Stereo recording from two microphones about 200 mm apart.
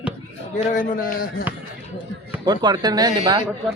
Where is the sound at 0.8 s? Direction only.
45° left (ahead or behind).